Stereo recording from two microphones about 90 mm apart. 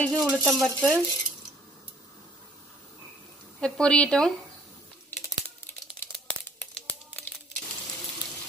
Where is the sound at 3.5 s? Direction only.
10° left (ahead or behind).